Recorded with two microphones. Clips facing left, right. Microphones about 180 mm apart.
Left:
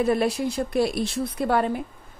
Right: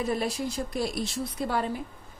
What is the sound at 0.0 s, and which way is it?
A woman's voice, 65° left (ahead or behind).